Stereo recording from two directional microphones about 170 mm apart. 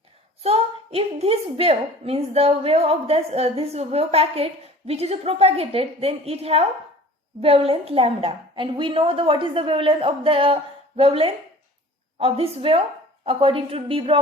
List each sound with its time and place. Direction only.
0.4 s a child's voice: 35° right (ahead or behind)